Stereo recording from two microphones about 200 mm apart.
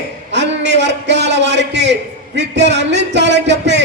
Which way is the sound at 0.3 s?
60° right (ahead or behind).